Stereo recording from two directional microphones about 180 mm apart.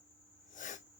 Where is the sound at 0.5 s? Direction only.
45° left (ahead or behind).